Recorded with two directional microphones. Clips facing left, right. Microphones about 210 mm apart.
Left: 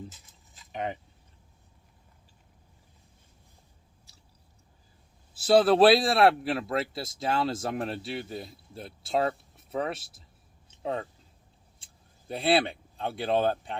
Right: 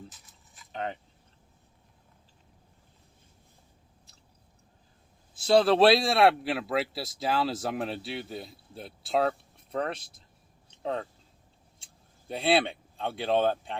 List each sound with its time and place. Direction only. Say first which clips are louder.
0.1 s a sound: left 2 dB; 25° left (ahead or behind)
5.3 s speech: left 1 dB; 5° left (ahead or behind)
12.3 s speech: even; centre (ahead or behind)